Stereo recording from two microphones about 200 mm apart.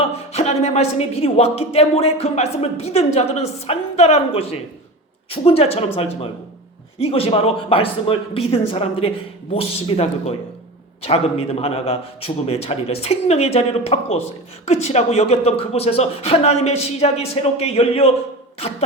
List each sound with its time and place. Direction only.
0.0 s speech: 30° left (ahead or behind)
7.0 s speech: 30° left (ahead or behind)